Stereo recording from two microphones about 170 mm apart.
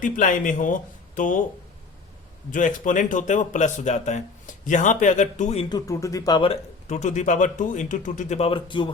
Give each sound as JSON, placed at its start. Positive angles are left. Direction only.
{"t": 0.0, "sound": "speech", "side_deg": 50}
{"t": 2.5, "sound": "speech", "side_deg": 50}
{"t": 5.6, "sound": "speech", "side_deg": 20}